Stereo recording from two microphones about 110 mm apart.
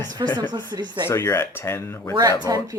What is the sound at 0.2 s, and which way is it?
Speech, 45° right (ahead or behind).